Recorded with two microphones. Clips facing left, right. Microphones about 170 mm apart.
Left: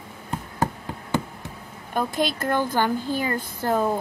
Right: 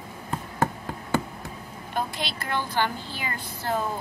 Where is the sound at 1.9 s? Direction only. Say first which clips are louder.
Left 6 dB; 45° left (ahead or behind).